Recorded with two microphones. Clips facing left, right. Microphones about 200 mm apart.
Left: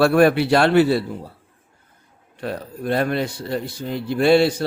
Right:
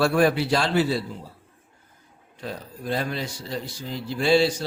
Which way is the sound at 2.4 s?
65° left (ahead or behind).